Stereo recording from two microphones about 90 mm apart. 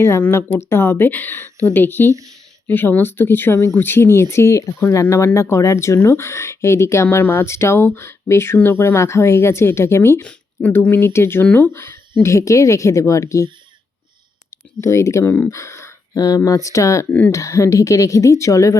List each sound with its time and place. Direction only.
0.3 s speech: 25° left (ahead or behind)
2.0 s speech: 40° right (ahead or behind)
2.6 s speech: 20° left (ahead or behind)
14.8 s speech: 35° left (ahead or behind)
15.2 s speech: 20° left (ahead or behind)
15.4 s speech: 30° left (ahead or behind)
16.1 s speech: 45° left (ahead or behind)
17.1 s speech: 20° left (ahead or behind)
17.3 s speech: 35° left (ahead or behind)